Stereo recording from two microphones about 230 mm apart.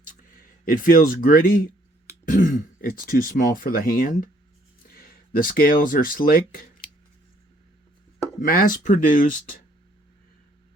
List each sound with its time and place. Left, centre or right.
0.6 s speech: left
8.4 s speech: left